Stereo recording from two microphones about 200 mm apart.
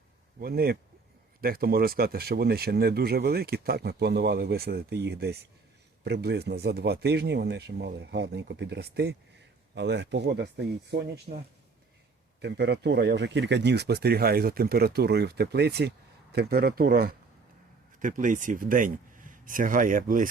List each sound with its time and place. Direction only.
0.3 s speech: 50° right (ahead or behind)
11.3 s speech: 40° right (ahead or behind)
12.4 s speech: 55° right (ahead or behind)
18.0 s speech: 40° right (ahead or behind)